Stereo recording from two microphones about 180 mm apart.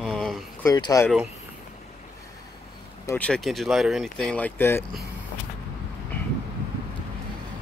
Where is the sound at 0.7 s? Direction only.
20° left (ahead or behind).